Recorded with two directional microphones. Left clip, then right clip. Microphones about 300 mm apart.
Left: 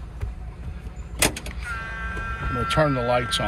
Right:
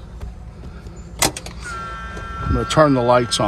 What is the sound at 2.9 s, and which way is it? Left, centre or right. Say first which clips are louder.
Speech: right 7 dB; right.